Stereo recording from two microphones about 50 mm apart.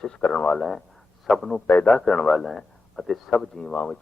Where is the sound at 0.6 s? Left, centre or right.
Centre.